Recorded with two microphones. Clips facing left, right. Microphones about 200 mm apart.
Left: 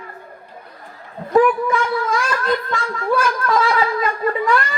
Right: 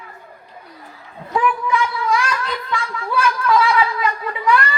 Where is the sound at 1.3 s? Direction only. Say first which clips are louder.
Left 5 dB; 45° left (ahead or behind).